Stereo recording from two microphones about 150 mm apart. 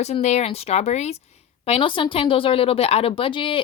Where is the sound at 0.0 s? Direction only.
45° left (ahead or behind).